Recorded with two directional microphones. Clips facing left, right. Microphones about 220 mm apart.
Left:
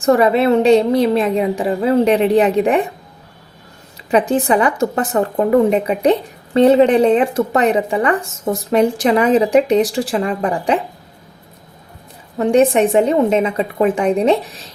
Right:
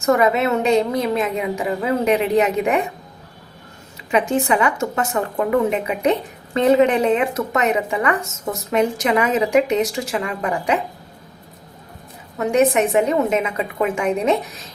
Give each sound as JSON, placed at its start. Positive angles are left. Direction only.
{"t": 0.0, "sound": "a woman's voice", "side_deg": 30}
{"t": 4.1, "sound": "a woman's voice", "side_deg": 35}
{"t": 12.4, "sound": "a woman's voice", "side_deg": 30}